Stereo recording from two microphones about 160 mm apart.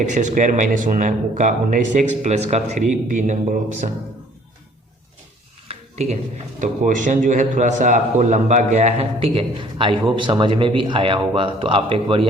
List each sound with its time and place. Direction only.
0.0 s speech: 50° right (ahead or behind)
5.6 s a sound: 40° right (ahead or behind)
6.6 s a man's voice: 55° right (ahead or behind); by 12.3 s 35° right (ahead or behind)